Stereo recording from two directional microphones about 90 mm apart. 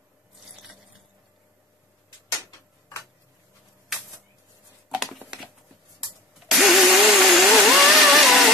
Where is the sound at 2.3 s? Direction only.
40° left (ahead or behind).